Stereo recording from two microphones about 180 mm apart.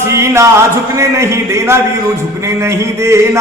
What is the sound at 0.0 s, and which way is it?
Speech, 15° right (ahead or behind).